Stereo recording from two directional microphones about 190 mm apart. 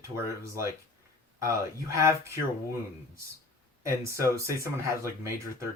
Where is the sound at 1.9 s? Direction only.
15° right (ahead or behind).